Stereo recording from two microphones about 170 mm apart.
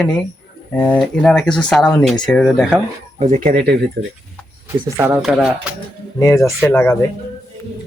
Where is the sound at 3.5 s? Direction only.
60° right (ahead or behind).